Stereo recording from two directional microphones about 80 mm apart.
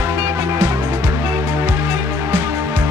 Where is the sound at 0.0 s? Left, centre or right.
Right.